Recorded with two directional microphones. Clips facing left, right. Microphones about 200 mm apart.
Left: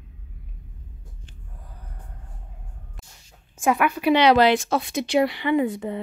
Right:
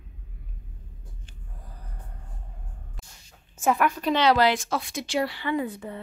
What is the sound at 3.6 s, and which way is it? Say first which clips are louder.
A woman's voice: left 2 dB; 5° left (ahead or behind).